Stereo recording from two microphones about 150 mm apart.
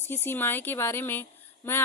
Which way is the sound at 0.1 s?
15° left (ahead or behind).